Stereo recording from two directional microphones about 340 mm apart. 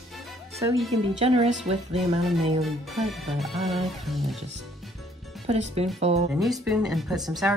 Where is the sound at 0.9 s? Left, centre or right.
Centre.